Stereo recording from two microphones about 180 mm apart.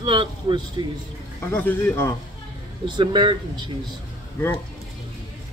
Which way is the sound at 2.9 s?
25° right (ahead or behind).